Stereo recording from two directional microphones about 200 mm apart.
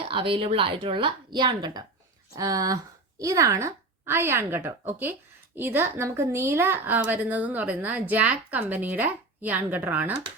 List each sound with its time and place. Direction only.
0.0 s a woman's voice: 25° right (ahead or behind); by 10.1 s 10° right (ahead or behind)